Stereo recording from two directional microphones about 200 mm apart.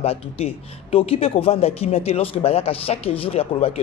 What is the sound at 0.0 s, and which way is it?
Speech, 30° left (ahead or behind).